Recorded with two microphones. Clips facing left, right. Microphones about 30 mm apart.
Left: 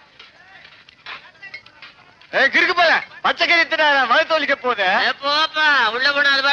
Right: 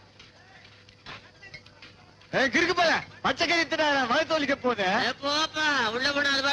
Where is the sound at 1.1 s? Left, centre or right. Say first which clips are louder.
Left 10 dB; left.